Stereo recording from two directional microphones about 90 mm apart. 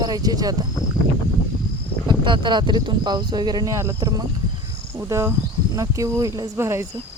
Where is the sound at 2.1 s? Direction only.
60° right (ahead or behind); by 6.8 s 30° right (ahead or behind).